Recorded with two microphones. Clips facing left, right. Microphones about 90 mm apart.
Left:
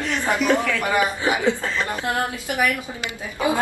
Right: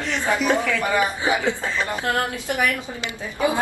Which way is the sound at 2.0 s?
20° left (ahead or behind).